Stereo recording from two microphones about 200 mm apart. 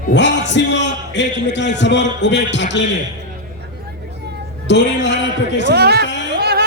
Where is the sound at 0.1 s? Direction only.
60° left (ahead or behind).